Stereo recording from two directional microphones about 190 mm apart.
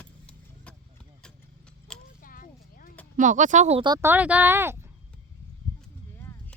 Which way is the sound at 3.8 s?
20° right (ahead or behind).